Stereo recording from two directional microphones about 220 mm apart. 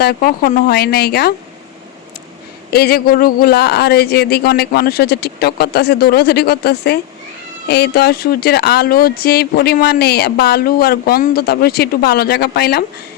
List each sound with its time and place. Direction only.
0.0 s speech: 45° left (ahead or behind)
2.6 s speech: 45° left (ahead or behind)